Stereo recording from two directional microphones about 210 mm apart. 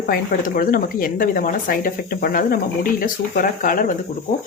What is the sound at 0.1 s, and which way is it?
Speech, 45° left (ahead or behind).